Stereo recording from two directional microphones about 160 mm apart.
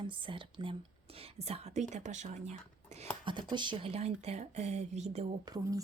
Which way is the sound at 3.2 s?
30° right (ahead or behind).